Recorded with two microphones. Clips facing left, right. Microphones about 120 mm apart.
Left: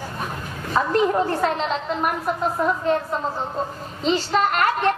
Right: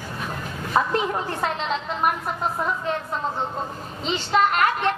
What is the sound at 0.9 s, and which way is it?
Speech, 40° left (ahead or behind).